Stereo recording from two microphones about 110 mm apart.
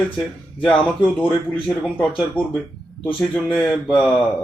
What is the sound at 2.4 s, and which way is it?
Speech, 15° left (ahead or behind).